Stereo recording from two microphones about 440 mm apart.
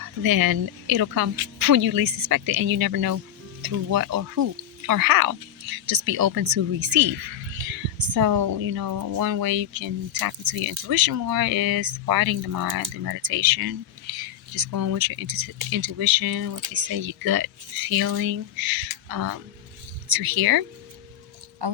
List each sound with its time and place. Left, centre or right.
0.2 s speech: right
20.1 s speech: right